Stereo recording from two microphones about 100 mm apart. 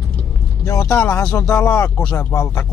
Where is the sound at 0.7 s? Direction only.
30° left (ahead or behind).